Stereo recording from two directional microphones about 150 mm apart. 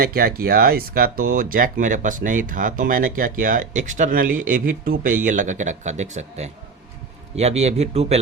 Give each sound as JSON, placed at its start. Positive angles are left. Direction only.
{"t": 0.0, "sound": "speech", "side_deg": -90}